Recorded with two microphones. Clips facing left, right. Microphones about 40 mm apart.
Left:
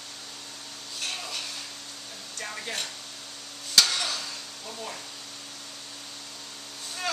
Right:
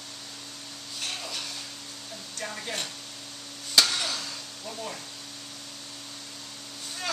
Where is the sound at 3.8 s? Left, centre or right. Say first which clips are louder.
Even; centre.